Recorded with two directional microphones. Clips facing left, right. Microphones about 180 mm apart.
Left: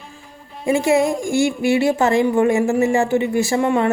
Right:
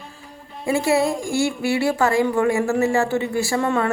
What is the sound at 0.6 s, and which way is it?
A woman's voice, 15° left (ahead or behind).